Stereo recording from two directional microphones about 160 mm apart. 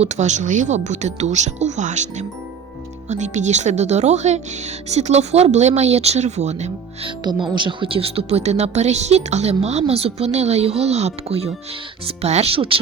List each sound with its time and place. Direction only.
0.0 s speech: 45° right (ahead or behind)
7.5 s speech: 30° right (ahead or behind)